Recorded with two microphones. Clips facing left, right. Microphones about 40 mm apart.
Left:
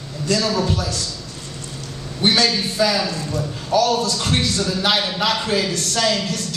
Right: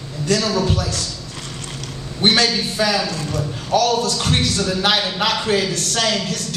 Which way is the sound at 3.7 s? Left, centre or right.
Right.